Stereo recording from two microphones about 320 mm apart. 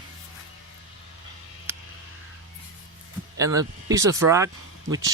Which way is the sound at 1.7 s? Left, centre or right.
Centre.